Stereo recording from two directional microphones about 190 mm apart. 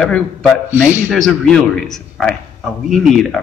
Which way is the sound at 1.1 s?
Centre (ahead or behind).